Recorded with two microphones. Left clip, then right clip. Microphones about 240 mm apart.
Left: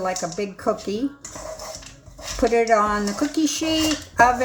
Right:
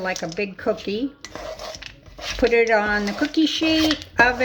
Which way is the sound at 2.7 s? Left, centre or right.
Right.